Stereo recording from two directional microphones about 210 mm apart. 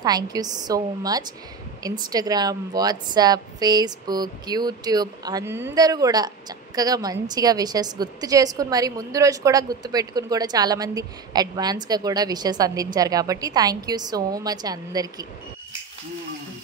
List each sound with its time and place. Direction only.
0.0 s a woman's voice: 20° right (ahead or behind)